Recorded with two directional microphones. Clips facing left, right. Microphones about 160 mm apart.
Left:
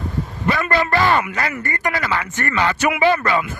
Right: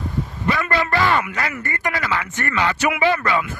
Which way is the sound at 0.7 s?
35° left (ahead or behind).